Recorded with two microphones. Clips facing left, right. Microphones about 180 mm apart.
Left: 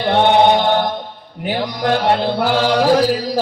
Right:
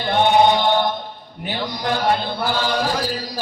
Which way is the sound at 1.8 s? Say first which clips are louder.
Left 5 dB; 85° left.